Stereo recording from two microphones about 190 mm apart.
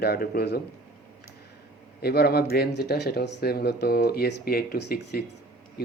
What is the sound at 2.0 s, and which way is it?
Speech, 55° left (ahead or behind).